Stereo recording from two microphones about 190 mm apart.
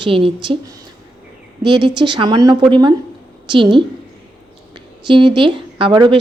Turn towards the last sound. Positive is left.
turn(degrees=-25)  # may be behind; listen again after turning